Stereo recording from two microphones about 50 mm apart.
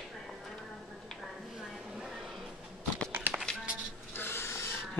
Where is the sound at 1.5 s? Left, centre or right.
Centre.